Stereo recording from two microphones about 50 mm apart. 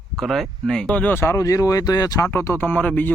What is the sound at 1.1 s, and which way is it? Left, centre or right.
Speech, left.